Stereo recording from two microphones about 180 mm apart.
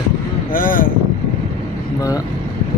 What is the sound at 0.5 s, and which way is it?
Speech, 50° left (ahead or behind).